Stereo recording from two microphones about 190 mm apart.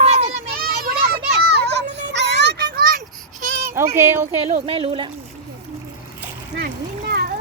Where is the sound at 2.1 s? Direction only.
65° right (ahead or behind); by 3.1 s 50° right (ahead or behind).